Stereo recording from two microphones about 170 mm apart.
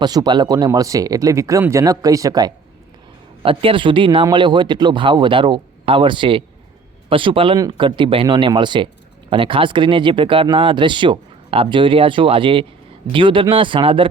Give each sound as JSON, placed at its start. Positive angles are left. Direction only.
{"t": 0.0, "sound": "speech", "side_deg": -25}
{"t": 3.4, "sound": "speech", "side_deg": -30}